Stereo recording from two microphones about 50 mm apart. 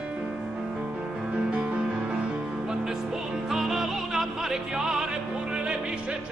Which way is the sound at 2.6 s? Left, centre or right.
Centre.